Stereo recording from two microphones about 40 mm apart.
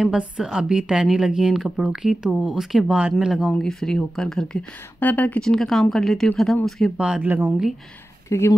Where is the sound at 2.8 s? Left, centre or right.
Right.